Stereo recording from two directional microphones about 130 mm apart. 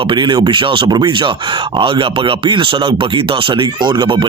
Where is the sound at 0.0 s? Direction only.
40° right (ahead or behind).